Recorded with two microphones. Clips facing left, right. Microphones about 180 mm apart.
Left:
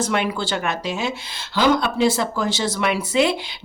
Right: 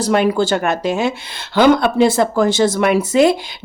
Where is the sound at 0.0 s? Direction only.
40° right (ahead or behind).